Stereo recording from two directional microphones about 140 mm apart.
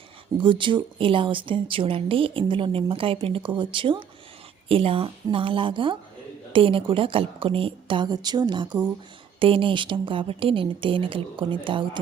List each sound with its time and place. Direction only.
0.3 s speech: 35° right (ahead or behind)